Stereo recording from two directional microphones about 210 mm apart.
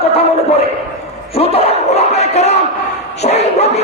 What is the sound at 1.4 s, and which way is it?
Speech, 30° left (ahead or behind).